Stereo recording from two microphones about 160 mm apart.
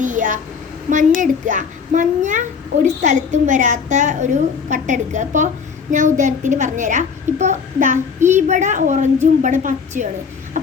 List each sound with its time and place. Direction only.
0.0 s a child's voice: 50° right (ahead or behind)